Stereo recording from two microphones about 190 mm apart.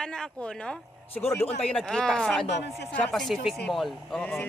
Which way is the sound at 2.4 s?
65° left (ahead or behind).